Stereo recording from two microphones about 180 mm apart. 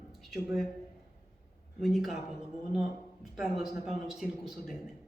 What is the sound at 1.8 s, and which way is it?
Speech, centre (ahead or behind).